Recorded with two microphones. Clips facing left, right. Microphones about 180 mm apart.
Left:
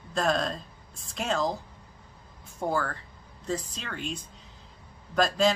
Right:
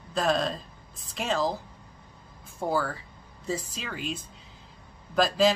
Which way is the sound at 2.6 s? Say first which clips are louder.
Right 1 dB; 5° right (ahead or behind).